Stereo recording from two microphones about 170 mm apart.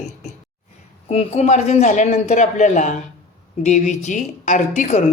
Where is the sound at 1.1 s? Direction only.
40° left (ahead or behind).